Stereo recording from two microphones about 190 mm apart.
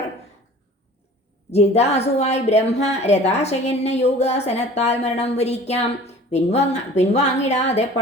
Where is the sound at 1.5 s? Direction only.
35° left (ahead or behind).